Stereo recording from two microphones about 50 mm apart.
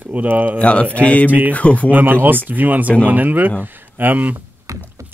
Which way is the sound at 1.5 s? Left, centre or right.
Left.